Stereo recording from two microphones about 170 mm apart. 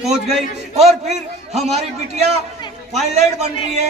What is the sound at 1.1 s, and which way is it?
A man's voice, 40° right (ahead or behind).